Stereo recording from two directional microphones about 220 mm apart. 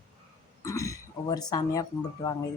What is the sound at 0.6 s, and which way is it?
Speech, 15° left (ahead or behind).